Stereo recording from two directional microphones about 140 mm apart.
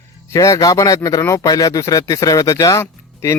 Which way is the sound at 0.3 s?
25° left (ahead or behind).